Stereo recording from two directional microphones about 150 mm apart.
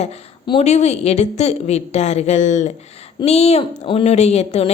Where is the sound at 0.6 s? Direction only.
50° left (ahead or behind).